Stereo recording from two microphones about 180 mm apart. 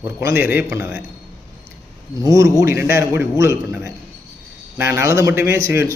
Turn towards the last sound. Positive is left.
turn(degrees=-15)  # may be behind; listen again after turning